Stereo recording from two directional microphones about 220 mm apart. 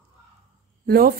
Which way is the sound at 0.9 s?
40° right (ahead or behind).